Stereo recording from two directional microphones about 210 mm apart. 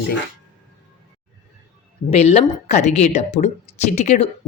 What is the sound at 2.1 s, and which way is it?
Speech, 30° left (ahead or behind).